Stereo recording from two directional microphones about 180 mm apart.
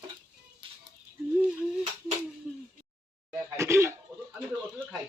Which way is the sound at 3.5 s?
15° right (ahead or behind).